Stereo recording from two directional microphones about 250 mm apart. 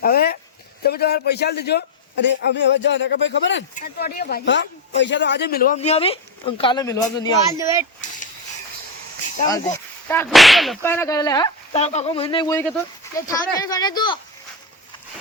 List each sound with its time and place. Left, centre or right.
0.0 s a man's voice: left
5.8 s speech: left
7.6 s speech: centre
9.5 s whip: centre
11.8 s speech: left